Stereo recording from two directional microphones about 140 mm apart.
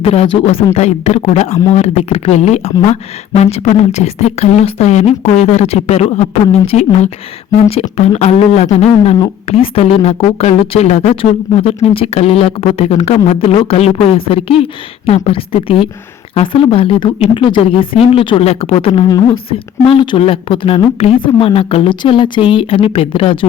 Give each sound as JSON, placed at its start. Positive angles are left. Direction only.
{"t": 0.0, "sound": "speech", "side_deg": 45}
{"t": 19.0, "sound": "a woman's voice", "side_deg": 30}
{"t": 19.5, "sound": "speech", "side_deg": 40}